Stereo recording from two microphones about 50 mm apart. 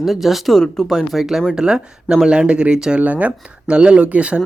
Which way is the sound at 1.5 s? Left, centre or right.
Centre.